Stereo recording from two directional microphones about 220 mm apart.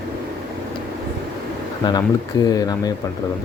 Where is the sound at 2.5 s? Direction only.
15° left (ahead or behind).